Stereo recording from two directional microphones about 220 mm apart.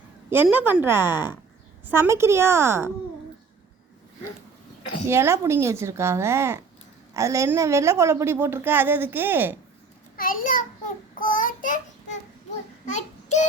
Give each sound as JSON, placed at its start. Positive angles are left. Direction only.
{"t": 0.3, "sound": "a woman's voice", "side_deg": -10}
{"t": 5.0, "sound": "a woman's voice", "side_deg": -10}
{"t": 10.2, "sound": "a child's voice", "side_deg": 40}
{"t": 11.2, "sound": "child singing", "side_deg": 40}
{"t": 12.8, "sound": "child singing", "side_deg": 30}